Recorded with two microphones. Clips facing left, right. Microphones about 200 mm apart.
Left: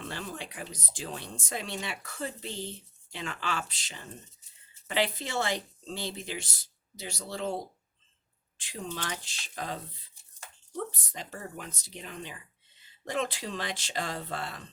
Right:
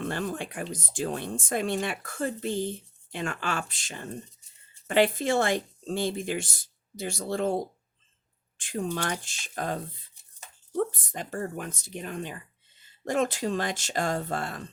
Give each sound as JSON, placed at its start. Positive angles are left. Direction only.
{"t": 0.0, "sound": "speech", "side_deg": -50}